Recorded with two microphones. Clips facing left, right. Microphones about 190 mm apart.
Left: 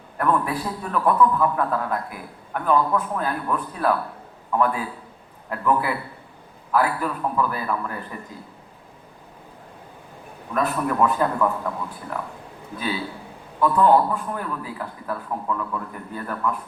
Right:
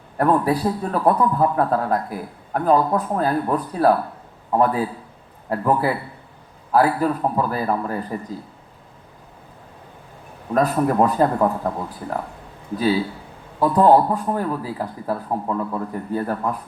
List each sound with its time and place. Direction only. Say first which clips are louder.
0.2 s a man's voice: right 5 dB; 35° right (ahead or behind)
10.5 s a man's voice: right 5 dB; 40° right (ahead or behind)
12.7 s a man's voice: right 8 dB; 35° right (ahead or behind)